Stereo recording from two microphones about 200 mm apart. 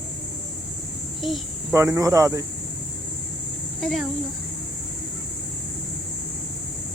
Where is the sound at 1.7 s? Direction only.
15° right (ahead or behind).